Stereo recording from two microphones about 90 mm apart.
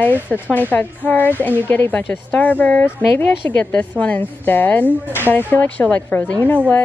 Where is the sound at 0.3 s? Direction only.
15° left (ahead or behind).